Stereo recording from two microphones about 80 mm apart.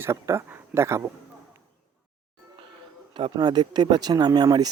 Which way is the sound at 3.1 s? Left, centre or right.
Right.